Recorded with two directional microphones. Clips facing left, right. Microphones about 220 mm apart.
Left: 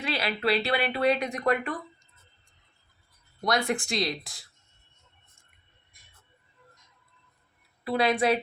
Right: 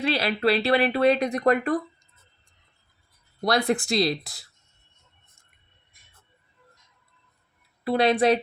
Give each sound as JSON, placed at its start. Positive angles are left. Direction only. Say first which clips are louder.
{"t": 0.0, "sound": "speech", "louder": "right 5 dB", "side_deg": -35}
{"t": 3.4, "sound": "speech", "louder": "right 4 dB", "side_deg": -35}
{"t": 8.0, "sound": "speech", "louder": "right 4 dB", "side_deg": -30}